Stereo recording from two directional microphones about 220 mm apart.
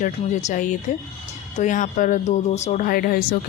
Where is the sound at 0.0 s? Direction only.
35° left (ahead or behind).